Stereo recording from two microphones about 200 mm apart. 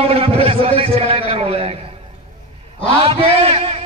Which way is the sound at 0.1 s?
30° right (ahead or behind).